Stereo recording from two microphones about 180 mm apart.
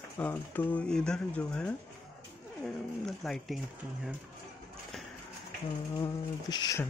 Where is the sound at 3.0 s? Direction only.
Centre (ahead or behind).